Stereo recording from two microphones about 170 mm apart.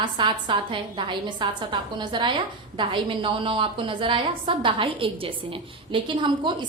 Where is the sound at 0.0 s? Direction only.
25° right (ahead or behind).